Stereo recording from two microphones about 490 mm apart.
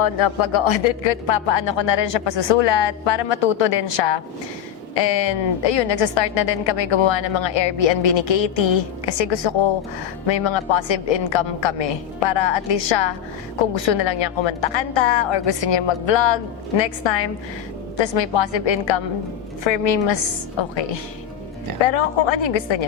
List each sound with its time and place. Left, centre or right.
0.0 s a woman's voice: left